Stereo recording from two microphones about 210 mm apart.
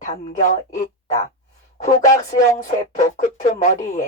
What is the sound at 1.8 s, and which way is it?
Speech, 35° left (ahead or behind).